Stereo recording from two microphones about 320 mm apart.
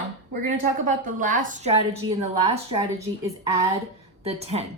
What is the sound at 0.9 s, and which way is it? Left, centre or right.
A woman's voice, right.